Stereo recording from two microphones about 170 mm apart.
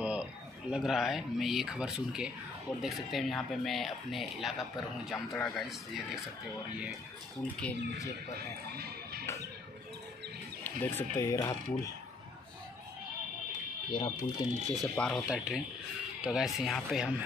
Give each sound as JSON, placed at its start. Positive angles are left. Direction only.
{"t": 0.0, "sound": "speech", "side_deg": -5}
{"t": 8.7, "sound": "speech", "side_deg": -65}
{"t": 10.6, "sound": "speech", "side_deg": 10}
{"t": 13.8, "sound": "speech", "side_deg": 30}
{"t": 14.7, "sound": "speech", "side_deg": 5}